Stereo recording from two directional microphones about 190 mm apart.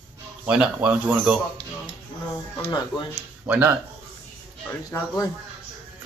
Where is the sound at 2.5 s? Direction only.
25° left (ahead or behind).